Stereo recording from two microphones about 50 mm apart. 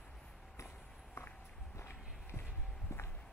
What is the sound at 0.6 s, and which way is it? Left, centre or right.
Walk, left.